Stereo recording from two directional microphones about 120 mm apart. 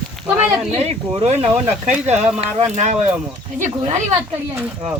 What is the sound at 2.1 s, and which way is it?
Speech, 5° right (ahead or behind).